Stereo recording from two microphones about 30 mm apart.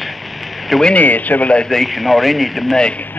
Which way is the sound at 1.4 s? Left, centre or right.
Left.